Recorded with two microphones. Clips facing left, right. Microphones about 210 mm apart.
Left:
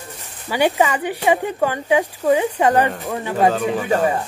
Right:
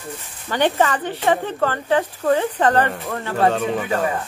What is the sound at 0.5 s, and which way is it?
Speech, 10° left (ahead or behind).